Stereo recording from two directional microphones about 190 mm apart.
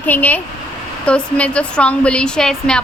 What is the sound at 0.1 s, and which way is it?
A woman's voice, 10° left (ahead or behind).